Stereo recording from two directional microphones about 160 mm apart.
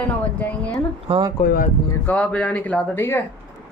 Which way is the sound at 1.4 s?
70° left (ahead or behind).